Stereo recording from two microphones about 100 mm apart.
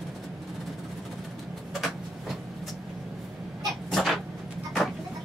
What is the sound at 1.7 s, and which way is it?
Vehicle, centre (ahead or behind).